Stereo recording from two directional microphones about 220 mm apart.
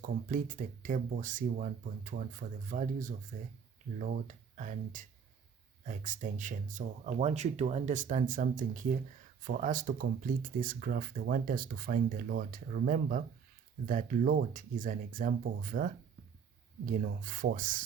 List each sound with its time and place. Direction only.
0.3 s speech: 35° right (ahead or behind)